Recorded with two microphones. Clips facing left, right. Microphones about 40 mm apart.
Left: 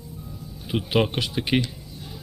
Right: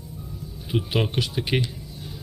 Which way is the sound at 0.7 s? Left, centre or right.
Centre.